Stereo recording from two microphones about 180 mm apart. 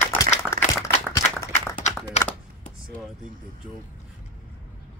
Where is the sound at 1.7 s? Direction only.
40° left (ahead or behind).